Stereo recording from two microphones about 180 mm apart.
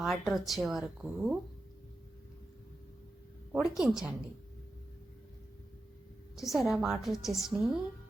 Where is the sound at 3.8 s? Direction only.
5° right (ahead or behind).